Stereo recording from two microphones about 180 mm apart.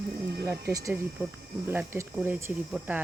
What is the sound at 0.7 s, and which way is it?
Speech, 20° right (ahead or behind).